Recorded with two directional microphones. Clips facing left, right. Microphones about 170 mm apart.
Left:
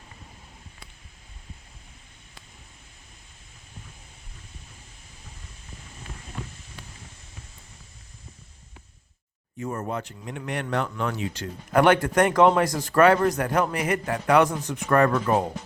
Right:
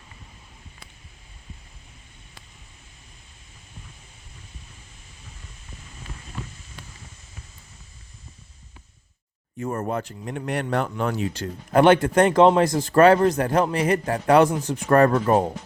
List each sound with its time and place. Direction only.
9.6 s speech: 50° right (ahead or behind)
11.7 s a man's voice: 25° right (ahead or behind)